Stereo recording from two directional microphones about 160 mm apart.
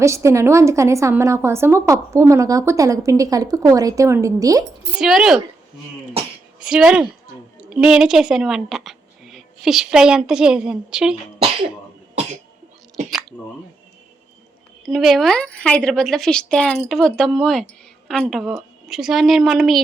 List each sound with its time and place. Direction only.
0.0 s a woman's voice: 20° right (ahead or behind)
4.9 s a woman's voice: 5° right (ahead or behind)
6.7 s a woman's voice: 5° right (ahead or behind)
14.8 s a woman's voice: centre (ahead or behind)